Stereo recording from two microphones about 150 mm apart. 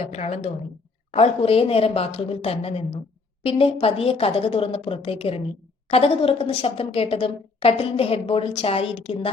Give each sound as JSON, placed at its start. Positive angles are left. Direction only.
{"t": 0.1, "sound": "a woman's voice", "side_deg": 45}